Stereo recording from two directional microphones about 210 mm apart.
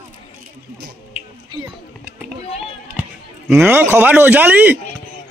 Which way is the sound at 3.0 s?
5° right (ahead or behind).